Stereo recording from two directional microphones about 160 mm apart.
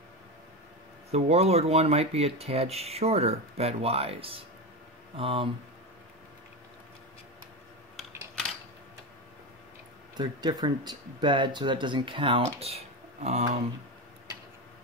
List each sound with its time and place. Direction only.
1.1 s speech: 40° right (ahead or behind)
7.9 s a sound: centre (ahead or behind)
10.1 s speech: 25° right (ahead or behind); by 13.5 s 45° right (ahead or behind)